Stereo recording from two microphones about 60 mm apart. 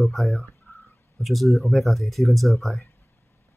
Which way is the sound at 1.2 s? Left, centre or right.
Centre.